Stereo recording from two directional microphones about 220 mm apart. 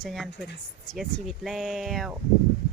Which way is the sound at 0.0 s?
Centre (ahead or behind).